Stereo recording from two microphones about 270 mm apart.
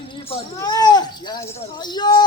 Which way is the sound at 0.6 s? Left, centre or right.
Centre.